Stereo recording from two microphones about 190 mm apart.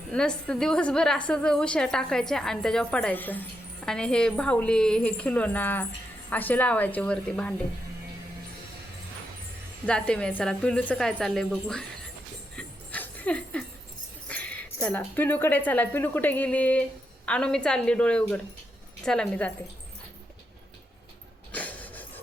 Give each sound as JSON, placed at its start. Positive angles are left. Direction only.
{"t": 0.1, "sound": "a woman's voice", "side_deg": 5}
{"t": 9.8, "sound": "a woman's voice", "side_deg": 5}
{"t": 12.5, "sound": "jingle bell", "side_deg": 10}
{"t": 14.3, "sound": "a woman's voice", "side_deg": 5}
{"t": 21.5, "sound": "a sound", "side_deg": 10}